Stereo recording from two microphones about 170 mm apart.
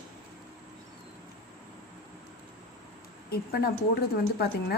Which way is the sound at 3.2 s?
65° left (ahead or behind).